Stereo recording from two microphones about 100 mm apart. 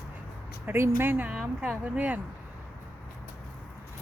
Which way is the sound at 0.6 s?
25° right (ahead or behind).